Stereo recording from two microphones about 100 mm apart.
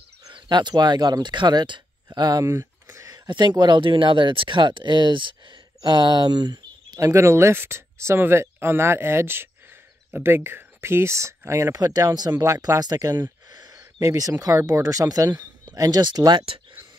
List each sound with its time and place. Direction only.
0.3 s speech: 50° right (ahead or behind)
2.4 s a sound: 30° right (ahead or behind)
3.3 s speech: 50° right (ahead or behind)
7.0 s speech: 30° right (ahead or behind); by 16.4 s 50° right (ahead or behind)